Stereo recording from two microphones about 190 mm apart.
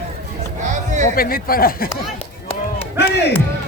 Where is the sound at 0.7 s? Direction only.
40° right (ahead or behind).